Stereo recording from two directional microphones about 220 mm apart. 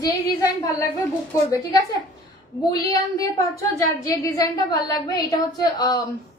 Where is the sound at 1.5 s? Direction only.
15° left (ahead or behind).